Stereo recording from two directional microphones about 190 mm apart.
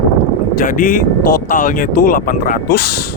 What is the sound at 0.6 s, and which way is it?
Speech, 45° left (ahead or behind).